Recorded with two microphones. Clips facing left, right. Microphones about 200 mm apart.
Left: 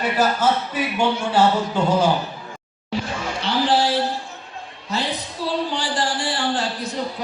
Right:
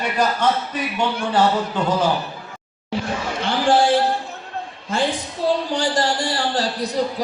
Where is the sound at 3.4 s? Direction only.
50° right (ahead or behind).